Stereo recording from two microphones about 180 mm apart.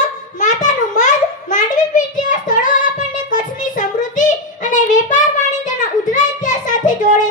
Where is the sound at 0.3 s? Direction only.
45° left (ahead or behind).